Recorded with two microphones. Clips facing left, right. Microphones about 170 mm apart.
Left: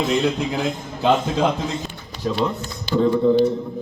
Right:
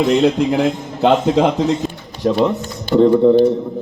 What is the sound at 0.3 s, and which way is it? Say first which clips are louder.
A man's voice: right 8 dB; 65° right (ahead or behind).